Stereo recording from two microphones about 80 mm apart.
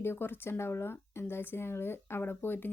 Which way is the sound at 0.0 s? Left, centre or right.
Left.